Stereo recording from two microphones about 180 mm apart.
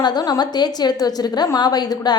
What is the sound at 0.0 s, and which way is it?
A woman's voice, 20° left (ahead or behind).